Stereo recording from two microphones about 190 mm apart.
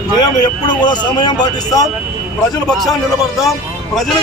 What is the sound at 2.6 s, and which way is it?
A man's voice, centre (ahead or behind).